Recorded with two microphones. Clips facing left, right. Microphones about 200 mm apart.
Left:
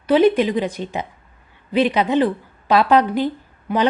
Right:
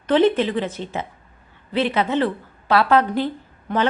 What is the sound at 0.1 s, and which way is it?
Speech, 10° left (ahead or behind).